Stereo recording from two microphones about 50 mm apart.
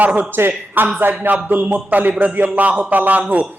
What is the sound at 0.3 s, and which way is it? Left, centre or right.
A man's voice, right.